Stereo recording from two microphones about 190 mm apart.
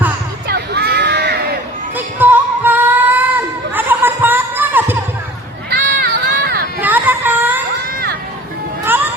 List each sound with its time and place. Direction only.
0.4 s a sound: 55° right (ahead or behind)
2.0 s music: 10° right (ahead or behind)
5.7 s run: 65° right (ahead or behind)
6.7 s child singing: 10° right (ahead or behind)